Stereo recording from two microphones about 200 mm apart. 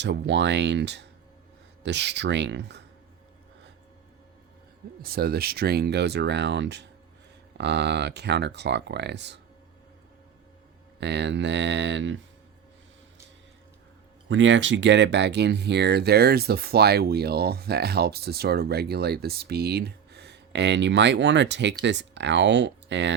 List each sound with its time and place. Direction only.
0.0 s speech: 60° right (ahead or behind)
5.0 s speech: 50° right (ahead or behind)
11.0 s speech: 60° right (ahead or behind)
14.3 s speech: 70° right (ahead or behind)